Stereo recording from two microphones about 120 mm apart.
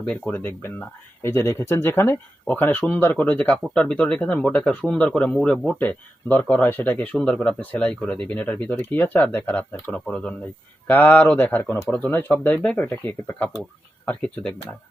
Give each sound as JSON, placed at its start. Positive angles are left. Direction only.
{"t": 0.0, "sound": "speech", "side_deg": 15}